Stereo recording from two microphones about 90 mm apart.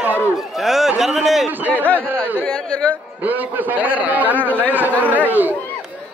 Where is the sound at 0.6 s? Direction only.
5° right (ahead or behind).